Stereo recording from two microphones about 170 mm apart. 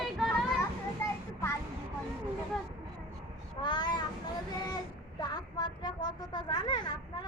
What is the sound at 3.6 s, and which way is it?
Speech, 25° left (ahead or behind).